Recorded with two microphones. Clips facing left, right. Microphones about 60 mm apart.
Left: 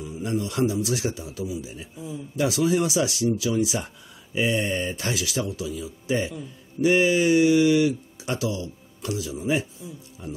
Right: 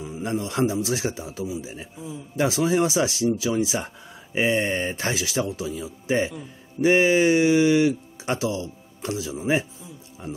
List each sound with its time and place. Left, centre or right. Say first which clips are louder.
0.0 s a man's voice: even; right